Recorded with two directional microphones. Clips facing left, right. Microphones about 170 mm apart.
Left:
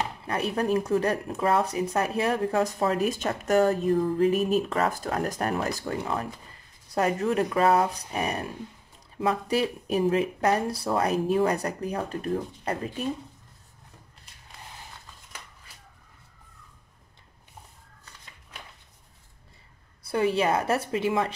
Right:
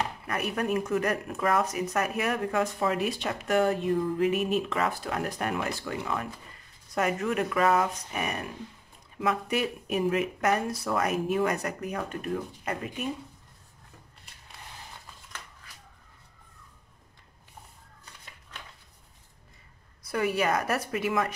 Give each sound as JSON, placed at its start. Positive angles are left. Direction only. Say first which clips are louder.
{"t": 0.3, "sound": "speech", "louder": "left 4 dB", "side_deg": 30}
{"t": 20.1, "sound": "a woman's voice", "louder": "left 3 dB", "side_deg": 25}